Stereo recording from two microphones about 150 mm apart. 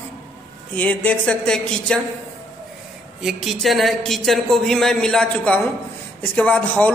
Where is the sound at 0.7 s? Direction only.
10° left (ahead or behind).